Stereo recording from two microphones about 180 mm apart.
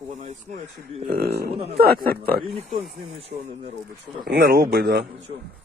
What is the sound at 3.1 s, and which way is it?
Speech, 30° right (ahead or behind).